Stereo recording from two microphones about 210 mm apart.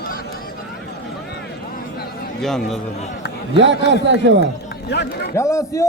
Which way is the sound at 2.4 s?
Centre (ahead or behind).